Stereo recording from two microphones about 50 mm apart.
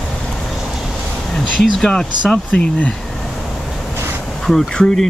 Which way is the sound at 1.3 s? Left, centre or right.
Centre.